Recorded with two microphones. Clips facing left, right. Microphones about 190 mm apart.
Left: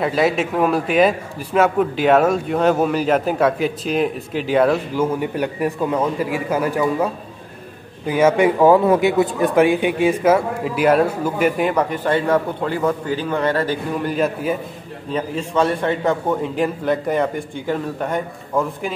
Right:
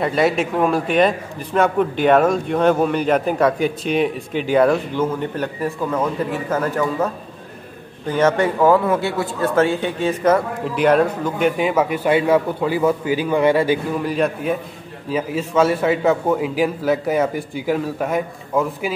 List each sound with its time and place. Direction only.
0.0 s a man's voice: centre (ahead or behind)
8.1 s a man's voice: 10° left (ahead or behind); by 13.7 s 10° right (ahead or behind)
14.0 s a man's voice: centre (ahead or behind)